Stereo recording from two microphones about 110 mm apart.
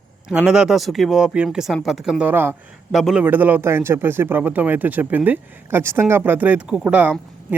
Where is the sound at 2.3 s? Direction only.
20° right (ahead or behind).